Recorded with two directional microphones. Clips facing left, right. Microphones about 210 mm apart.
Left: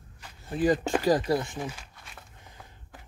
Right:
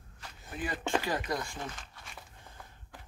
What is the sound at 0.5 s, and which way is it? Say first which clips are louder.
Speech: left 9 dB; 35° left (ahead or behind).